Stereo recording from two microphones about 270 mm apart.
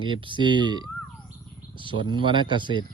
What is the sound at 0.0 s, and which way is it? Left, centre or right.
Speech, centre.